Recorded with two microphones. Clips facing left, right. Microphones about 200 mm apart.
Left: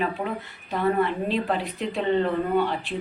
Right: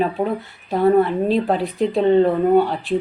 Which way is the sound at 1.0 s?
40° right (ahead or behind).